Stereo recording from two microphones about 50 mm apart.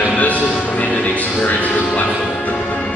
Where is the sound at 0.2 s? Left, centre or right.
Left.